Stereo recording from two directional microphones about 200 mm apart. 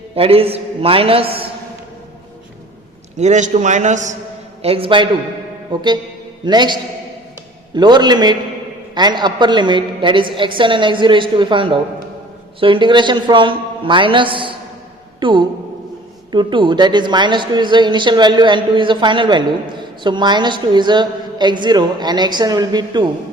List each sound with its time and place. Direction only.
0.2 s a woman's voice: 30° right (ahead or behind)
3.2 s a man's voice: 35° right (ahead or behind)
7.8 s a woman's voice: 20° right (ahead or behind)